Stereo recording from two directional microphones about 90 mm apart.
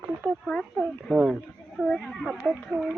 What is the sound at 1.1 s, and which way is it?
Speech, centre (ahead or behind).